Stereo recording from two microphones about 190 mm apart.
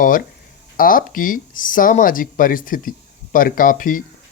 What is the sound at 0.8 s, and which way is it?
Speech, 45° left (ahead or behind).